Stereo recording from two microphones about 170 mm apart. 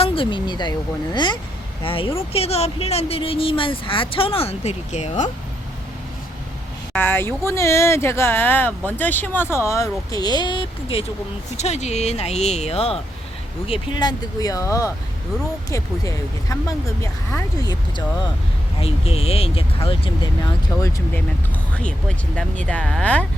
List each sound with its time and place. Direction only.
0.0 s speech: 30° left (ahead or behind)
6.9 s speech: 10° left (ahead or behind); by 11.0 s 30° left (ahead or behind)
11.5 s speech: 40° left (ahead or behind); by 18.0 s 20° left (ahead or behind)
18.8 s speech: 35° left (ahead or behind)
22.6 s speech: 5° left (ahead or behind)